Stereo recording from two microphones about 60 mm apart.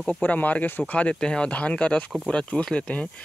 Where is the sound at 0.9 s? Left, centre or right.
Centre.